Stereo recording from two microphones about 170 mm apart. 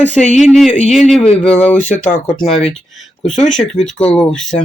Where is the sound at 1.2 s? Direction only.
35° left (ahead or behind).